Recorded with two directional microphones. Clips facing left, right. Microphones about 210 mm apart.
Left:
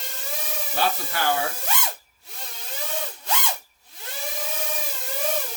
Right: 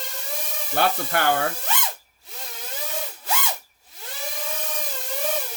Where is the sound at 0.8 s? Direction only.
60° right (ahead or behind).